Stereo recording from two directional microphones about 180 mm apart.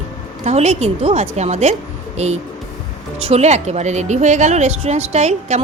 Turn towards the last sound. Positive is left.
turn(degrees=-40)  # may be behind; listen again after turning